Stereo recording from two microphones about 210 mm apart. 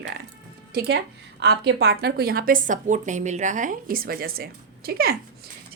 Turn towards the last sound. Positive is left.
turn(degrees=-45)  # may be behind; listen again after turning